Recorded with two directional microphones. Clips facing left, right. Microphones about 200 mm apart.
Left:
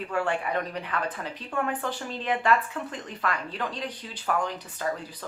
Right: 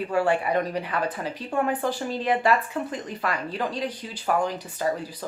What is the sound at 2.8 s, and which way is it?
Speech, 10° right (ahead or behind).